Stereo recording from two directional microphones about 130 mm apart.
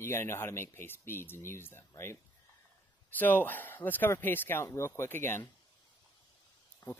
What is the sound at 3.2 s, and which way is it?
Speech, 15° left (ahead or behind).